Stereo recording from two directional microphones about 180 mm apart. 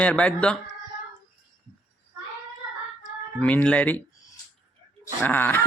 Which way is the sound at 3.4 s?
10° left (ahead or behind).